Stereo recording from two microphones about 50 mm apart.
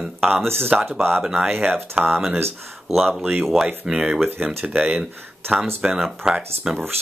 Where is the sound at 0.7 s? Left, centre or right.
Centre.